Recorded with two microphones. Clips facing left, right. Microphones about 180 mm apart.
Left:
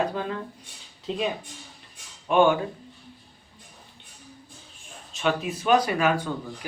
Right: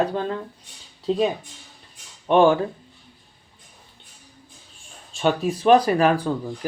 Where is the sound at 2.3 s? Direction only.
35° right (ahead or behind).